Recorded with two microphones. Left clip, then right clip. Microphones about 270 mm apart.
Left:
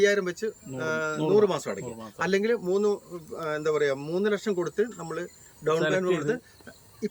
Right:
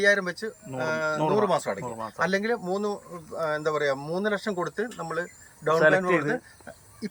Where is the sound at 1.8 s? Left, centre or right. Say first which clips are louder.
Right 5 dB; right.